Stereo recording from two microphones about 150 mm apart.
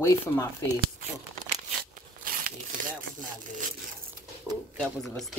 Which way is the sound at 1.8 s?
75° right (ahead or behind).